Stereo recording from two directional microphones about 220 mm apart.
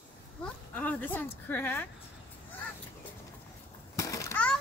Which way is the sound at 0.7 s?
5° left (ahead or behind).